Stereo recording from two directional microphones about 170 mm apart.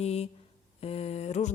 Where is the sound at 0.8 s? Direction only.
35° left (ahead or behind).